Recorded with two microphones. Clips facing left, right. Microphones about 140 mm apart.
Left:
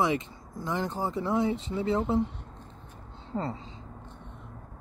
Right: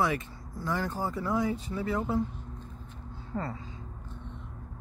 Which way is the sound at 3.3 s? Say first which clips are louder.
Left 2 dB; 25° left (ahead or behind).